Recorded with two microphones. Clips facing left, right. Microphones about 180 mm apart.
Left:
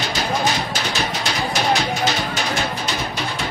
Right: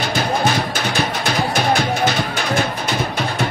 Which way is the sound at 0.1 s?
55° right (ahead or behind).